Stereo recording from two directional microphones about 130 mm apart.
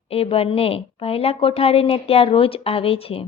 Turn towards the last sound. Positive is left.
turn(degrees=45)  # may be behind; listen again after turning